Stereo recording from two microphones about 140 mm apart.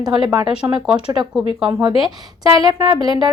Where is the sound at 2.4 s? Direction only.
25° right (ahead or behind).